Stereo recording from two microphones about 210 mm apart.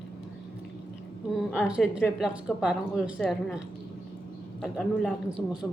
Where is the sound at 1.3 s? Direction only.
Centre (ahead or behind).